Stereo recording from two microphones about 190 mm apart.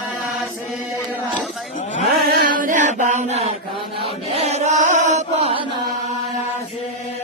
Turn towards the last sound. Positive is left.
turn(degrees=-30)  # may be behind; listen again after turning